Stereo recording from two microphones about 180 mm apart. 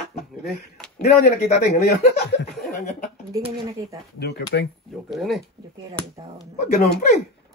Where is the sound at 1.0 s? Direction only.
45° left (ahead or behind).